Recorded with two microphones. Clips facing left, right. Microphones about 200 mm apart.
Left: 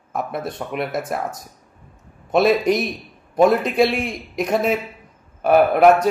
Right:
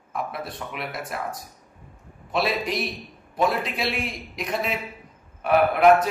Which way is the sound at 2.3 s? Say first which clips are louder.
Left 9 dB; 45° left (ahead or behind).